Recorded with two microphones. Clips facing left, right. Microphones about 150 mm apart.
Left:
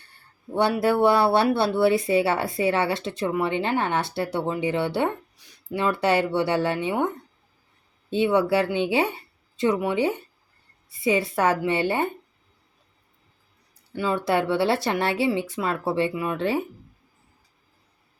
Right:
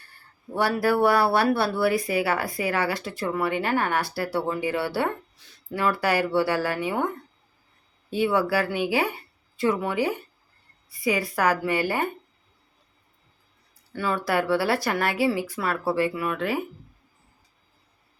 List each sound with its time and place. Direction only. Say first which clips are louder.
0.5 s speech: left 2 dB; 20° left (ahead or behind)
8.1 s speech: left 2 dB; 20° left (ahead or behind)
13.9 s speech: left 2 dB; 15° left (ahead or behind)